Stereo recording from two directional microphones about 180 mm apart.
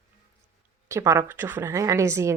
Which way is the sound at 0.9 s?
15° right (ahead or behind).